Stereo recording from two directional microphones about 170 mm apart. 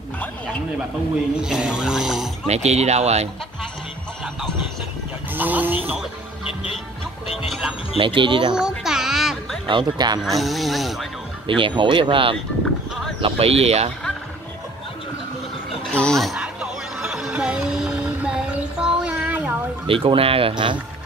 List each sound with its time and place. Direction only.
1.3 s speech: 5° right (ahead or behind)
2.4 s speech: 40° right (ahead or behind)
5.3 s speech: 10° right (ahead or behind)
8.0 s speech: 30° right (ahead or behind)
8.5 s music: 5° right (ahead or behind)
9.7 s speech: 25° right (ahead or behind)
10.2 s speech: centre (ahead or behind)
11.4 s speech: 30° right (ahead or behind)
15.9 s speech: 5° left (ahead or behind)
17.0 s music: 5° right (ahead or behind)
18.8 s a sound: 5° right (ahead or behind)
19.9 s speech: 30° right (ahead or behind)